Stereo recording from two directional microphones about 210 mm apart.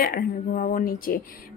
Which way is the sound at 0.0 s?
45° left (ahead or behind).